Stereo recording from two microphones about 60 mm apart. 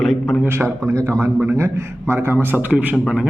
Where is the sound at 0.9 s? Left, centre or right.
Right.